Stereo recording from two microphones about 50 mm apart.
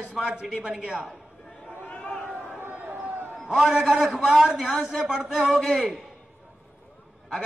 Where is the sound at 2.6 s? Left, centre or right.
Right.